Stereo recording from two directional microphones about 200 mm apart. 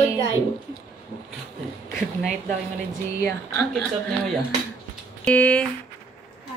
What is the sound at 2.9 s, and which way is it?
Speech, 15° left (ahead or behind).